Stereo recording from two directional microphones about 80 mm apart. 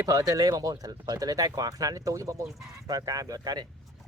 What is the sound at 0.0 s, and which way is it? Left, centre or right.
Speech, right.